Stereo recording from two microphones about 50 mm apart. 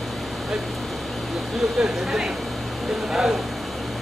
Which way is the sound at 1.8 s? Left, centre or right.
Centre.